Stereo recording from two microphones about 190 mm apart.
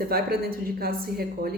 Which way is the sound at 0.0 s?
50° right (ahead or behind).